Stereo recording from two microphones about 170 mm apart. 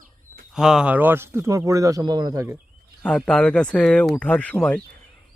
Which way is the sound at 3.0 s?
5° left (ahead or behind).